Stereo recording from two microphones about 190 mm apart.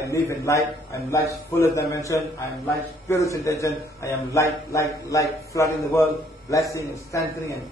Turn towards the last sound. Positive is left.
turn(degrees=15)  # may be behind; listen again after turning